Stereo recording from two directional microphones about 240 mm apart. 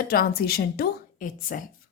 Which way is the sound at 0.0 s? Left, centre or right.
Left.